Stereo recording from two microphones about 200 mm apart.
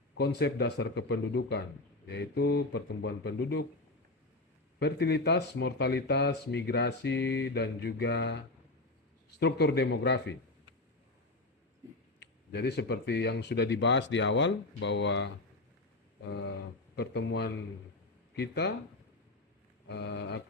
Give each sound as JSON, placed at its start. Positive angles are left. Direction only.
{"t": 0.2, "sound": "speech", "side_deg": 55}
{"t": 4.8, "sound": "speech", "side_deg": 55}
{"t": 9.4, "sound": "speech", "side_deg": 55}
{"t": 12.2, "sound": "speech", "side_deg": 55}
{"t": 16.9, "sound": "speech", "side_deg": 55}
{"t": 19.9, "sound": "speech", "side_deg": 60}